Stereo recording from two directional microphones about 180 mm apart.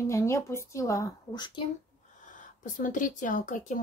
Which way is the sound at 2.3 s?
45° left (ahead or behind).